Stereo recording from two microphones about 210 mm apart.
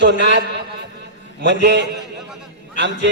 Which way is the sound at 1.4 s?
55° right (ahead or behind).